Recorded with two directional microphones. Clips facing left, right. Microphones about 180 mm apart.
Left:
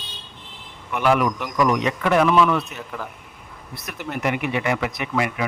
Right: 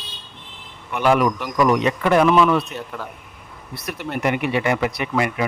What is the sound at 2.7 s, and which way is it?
Speech, centre (ahead or behind).